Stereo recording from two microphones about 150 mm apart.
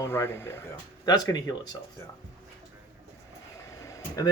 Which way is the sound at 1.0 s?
25° left (ahead or behind).